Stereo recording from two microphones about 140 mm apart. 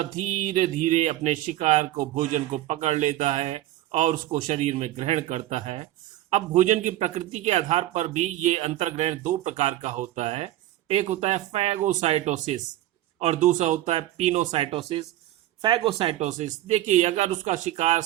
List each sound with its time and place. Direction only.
0.0 s a man's voice: 55° right (ahead or behind)
14.5 s a man's voice: 45° right (ahead or behind)